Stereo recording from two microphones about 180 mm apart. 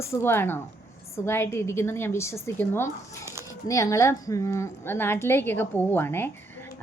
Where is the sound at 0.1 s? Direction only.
10° left (ahead or behind).